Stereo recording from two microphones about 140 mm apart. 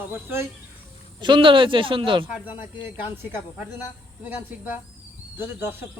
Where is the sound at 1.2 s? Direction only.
35° right (ahead or behind).